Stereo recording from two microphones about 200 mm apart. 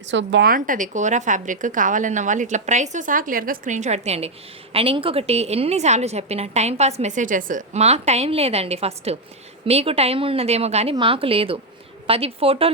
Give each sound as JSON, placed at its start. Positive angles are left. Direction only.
{"t": 0.1, "sound": "speech", "side_deg": -65}
{"t": 0.5, "sound": "a woman's voice", "side_deg": -40}